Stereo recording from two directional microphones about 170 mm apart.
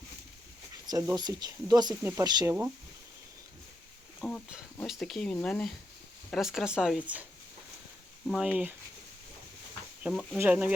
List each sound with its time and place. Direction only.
1.1 s speech: 25° right (ahead or behind)
4.2 s wild animals: 5° left (ahead or behind)
4.8 s speech: centre (ahead or behind)
8.3 s speech: 5° right (ahead or behind)
10.0 s speech: 5° right (ahead or behind)